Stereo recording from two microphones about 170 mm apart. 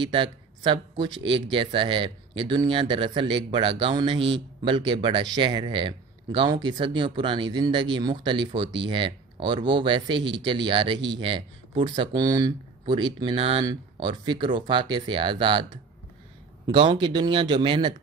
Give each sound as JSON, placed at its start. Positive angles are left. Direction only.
{"t": 0.0, "sound": "speech", "side_deg": -30}
{"t": 16.6, "sound": "speech", "side_deg": -25}